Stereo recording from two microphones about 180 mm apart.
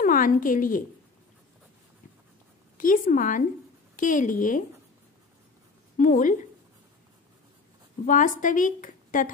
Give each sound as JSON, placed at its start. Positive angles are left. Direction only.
{"t": 0.0, "sound": "a woman's voice", "side_deg": 50}
{"t": 2.8, "sound": "a woman's voice", "side_deg": 50}
{"t": 5.9, "sound": "a woman's voice", "side_deg": 50}
{"t": 8.0, "sound": "a woman's voice", "side_deg": 45}